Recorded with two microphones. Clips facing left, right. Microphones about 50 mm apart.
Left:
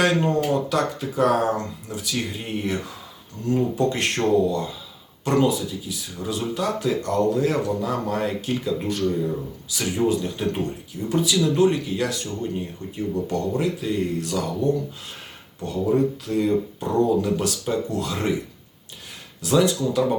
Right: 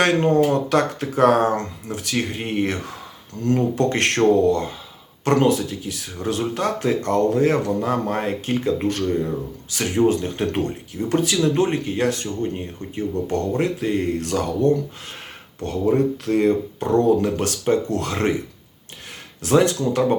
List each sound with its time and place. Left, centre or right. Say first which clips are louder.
0.0 s speech: right 4 dB; right
1.4 s speech: right 3 dB; right
19.4 s speech: right 2 dB; right